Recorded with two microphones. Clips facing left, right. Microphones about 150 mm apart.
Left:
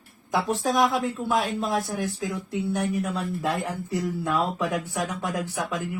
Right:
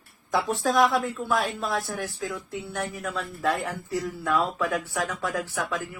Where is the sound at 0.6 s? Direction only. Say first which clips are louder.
Right 2 dB; 15° left (ahead or behind).